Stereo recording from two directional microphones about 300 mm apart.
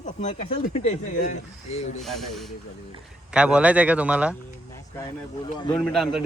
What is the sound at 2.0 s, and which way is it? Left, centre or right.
Speech, centre.